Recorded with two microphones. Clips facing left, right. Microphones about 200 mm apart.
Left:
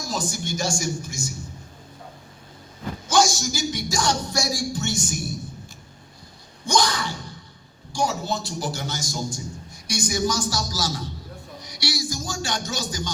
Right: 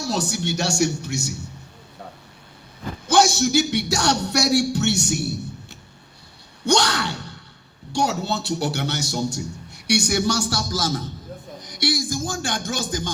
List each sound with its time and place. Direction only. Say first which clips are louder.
0.0 s a man's voice: right 4 dB; 70° right (ahead or behind)
3.1 s a man's voice: right 4 dB; 60° right (ahead or behind)
6.7 s a sound: right 3 dB; 70° right (ahead or behind)
7.9 s a man's voice: right 2 dB; 65° right (ahead or behind)